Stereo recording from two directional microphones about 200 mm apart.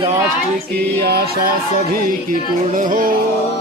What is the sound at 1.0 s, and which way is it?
Music, 50° right (ahead or behind).